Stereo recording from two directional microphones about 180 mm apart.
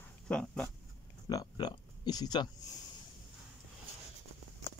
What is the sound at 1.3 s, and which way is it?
Speech, 25° left (ahead or behind).